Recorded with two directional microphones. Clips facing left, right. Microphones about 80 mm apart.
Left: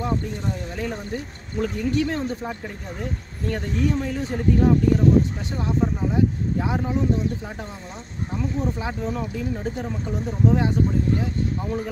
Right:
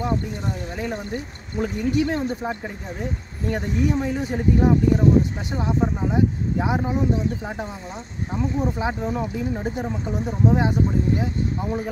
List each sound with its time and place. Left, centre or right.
0.7 s speech: centre
8.4 s speech: centre